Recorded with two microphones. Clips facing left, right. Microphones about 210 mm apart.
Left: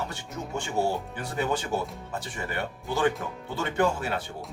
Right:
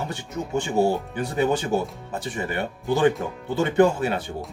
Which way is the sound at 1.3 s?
20° right (ahead or behind).